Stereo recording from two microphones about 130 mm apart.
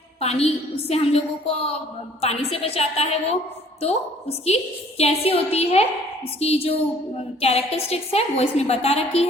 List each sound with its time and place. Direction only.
0.2 s a woman's voice: 50° left (ahead or behind)